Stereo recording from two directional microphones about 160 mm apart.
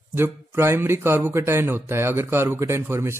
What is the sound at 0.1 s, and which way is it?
A man's voice, 15° right (ahead or behind).